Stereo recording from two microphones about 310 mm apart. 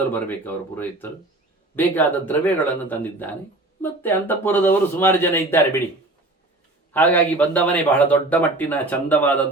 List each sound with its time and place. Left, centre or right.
0.1 s a man's voice: centre
6.9 s a man's voice: centre